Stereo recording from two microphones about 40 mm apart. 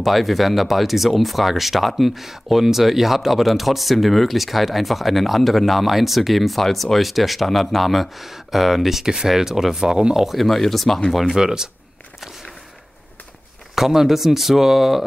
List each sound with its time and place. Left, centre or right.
0.0 s speech: centre
11.3 s speech: centre
13.7 s speech: centre